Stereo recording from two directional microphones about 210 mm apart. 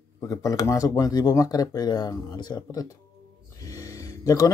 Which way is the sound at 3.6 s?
15° left (ahead or behind).